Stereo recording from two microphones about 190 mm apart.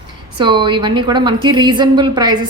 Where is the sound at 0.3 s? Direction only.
25° right (ahead or behind).